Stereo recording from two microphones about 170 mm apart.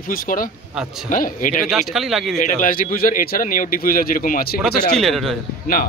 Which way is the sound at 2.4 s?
50° left (ahead or behind).